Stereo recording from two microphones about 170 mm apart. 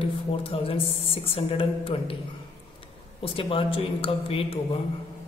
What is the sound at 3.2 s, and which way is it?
Speech, 30° left (ahead or behind).